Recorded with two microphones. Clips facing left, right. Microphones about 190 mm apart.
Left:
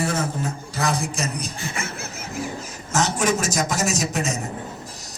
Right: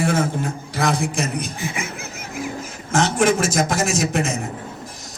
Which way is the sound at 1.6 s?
15° right (ahead or behind).